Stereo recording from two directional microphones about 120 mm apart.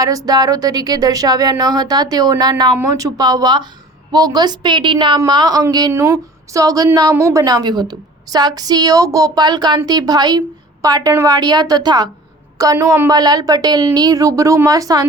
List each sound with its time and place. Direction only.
0.0 s speech: 30° right (ahead or behind)
5.9 s a woman's voice: 25° right (ahead or behind)